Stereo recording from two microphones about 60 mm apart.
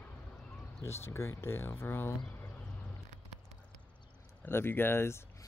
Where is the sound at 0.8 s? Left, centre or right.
Left.